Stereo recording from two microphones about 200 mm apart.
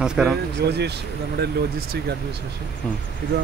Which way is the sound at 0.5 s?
55° right (ahead or behind).